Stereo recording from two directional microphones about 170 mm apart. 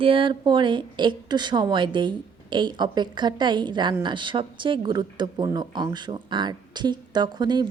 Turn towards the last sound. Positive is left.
turn(degrees=-25)  # may be behind; listen again after turning